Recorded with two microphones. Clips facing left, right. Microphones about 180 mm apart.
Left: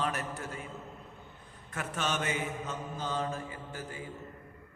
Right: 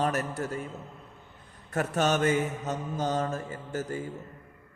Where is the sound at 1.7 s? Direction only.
40° right (ahead or behind).